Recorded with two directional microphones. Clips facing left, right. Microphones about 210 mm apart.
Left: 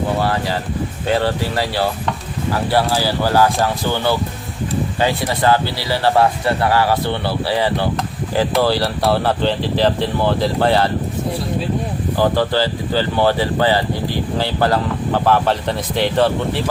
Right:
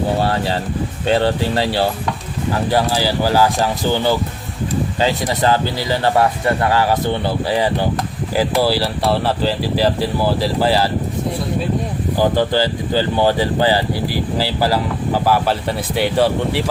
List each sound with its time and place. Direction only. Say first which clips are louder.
0.2 s speech: right 1 dB; 30° right (ahead or behind)
2.7 s speech: even; 15° right (ahead or behind)
5.4 s speech: left 1 dB; 15° right (ahead or behind)
12.1 s speech: right 1 dB; 15° right (ahead or behind)